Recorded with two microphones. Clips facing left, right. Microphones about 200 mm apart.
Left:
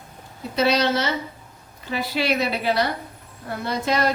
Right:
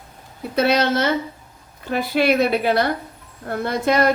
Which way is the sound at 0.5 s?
55° right (ahead or behind).